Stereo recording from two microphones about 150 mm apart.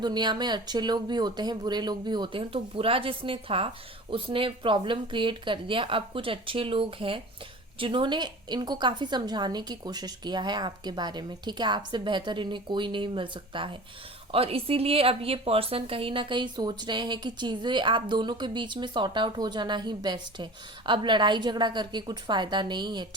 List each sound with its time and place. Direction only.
0.0 s a woman's voice: 30° right (ahead or behind)